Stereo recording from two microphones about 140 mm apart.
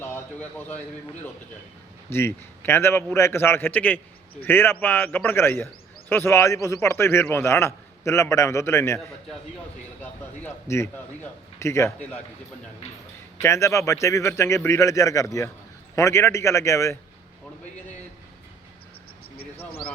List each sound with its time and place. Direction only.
0.0 s a sound: 15° left (ahead or behind)
2.0 s a man's voice: 15° left (ahead or behind)
10.0 s a man's voice: 15° left (ahead or behind)
13.4 s a man's voice: 20° left (ahead or behind)